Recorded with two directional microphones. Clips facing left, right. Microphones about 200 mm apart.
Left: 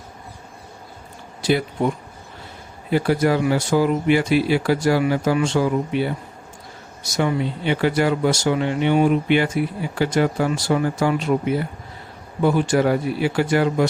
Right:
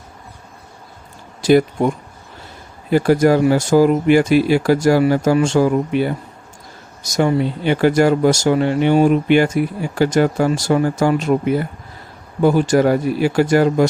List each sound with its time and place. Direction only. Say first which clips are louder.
1.4 s speech: right 7 dB; 45° right (ahead or behind)
2.9 s speech: right 5 dB; 45° right (ahead or behind)